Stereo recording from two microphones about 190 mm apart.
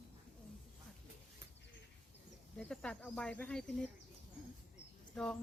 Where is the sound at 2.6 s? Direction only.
5° left (ahead or behind).